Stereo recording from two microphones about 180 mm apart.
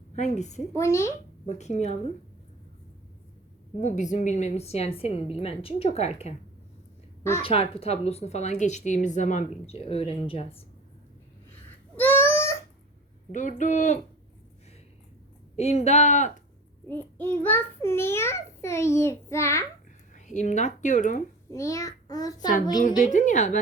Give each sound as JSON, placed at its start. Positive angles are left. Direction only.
{"t": 0.2, "sound": "a woman's voice", "side_deg": 40}
{"t": 0.7, "sound": "a child's voice", "side_deg": 15}
{"t": 1.5, "sound": "a woman's voice", "side_deg": 40}
{"t": 3.8, "sound": "a woman's voice", "side_deg": 40}
{"t": 7.4, "sound": "a woman's voice", "side_deg": 30}
{"t": 11.9, "sound": "a sound", "side_deg": 10}
{"t": 13.6, "sound": "a woman's voice", "side_deg": 45}
{"t": 15.5, "sound": "a woman's voice", "side_deg": 35}
{"t": 16.9, "sound": "a child's voice", "side_deg": 10}
{"t": 20.1, "sound": "speech", "side_deg": 40}
{"t": 21.5, "sound": "a child's voice", "side_deg": 15}
{"t": 22.8, "sound": "a woman's voice", "side_deg": 45}